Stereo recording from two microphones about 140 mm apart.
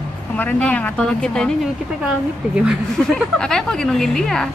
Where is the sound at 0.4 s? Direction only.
10° left (ahead or behind).